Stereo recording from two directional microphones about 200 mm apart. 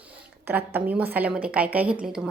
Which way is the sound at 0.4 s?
10° right (ahead or behind).